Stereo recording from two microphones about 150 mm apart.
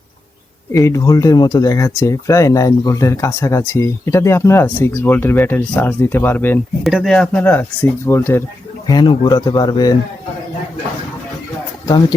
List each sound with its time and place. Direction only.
0.7 s speech: 20° left (ahead or behind)
6.8 s speech: centre (ahead or behind); by 8.4 s 15° left (ahead or behind)
8.9 s speech: 25° left (ahead or behind)
11.9 s speech: 25° left (ahead or behind)